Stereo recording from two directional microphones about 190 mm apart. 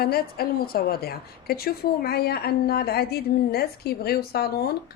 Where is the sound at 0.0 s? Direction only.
55° left (ahead or behind).